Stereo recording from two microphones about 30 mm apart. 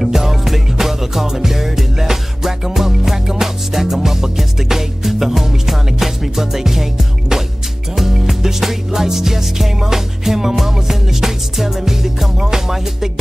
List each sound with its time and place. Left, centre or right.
0.1 s music: centre